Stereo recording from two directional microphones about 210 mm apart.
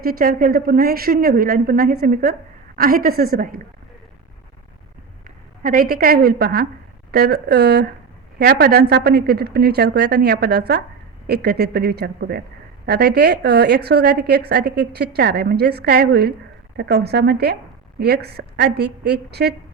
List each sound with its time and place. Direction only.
0.0 s a woman's voice: 45° right (ahead or behind)
5.6 s a woman's voice: 40° right (ahead or behind)